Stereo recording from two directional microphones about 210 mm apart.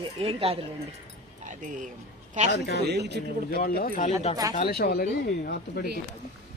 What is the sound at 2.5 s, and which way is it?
Speech, 50° left (ahead or behind).